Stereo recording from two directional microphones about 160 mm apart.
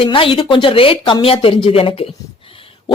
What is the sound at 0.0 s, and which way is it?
Speech, 35° left (ahead or behind).